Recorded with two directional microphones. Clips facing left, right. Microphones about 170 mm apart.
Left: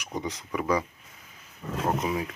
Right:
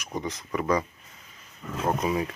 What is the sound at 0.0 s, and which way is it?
Speech, 15° left (ahead or behind).